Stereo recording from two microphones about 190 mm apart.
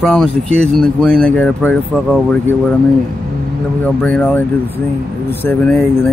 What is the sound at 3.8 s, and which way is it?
Speech, 5° left (ahead or behind).